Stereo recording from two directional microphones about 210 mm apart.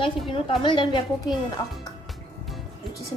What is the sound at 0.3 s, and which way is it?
A woman's voice, 25° left (ahead or behind).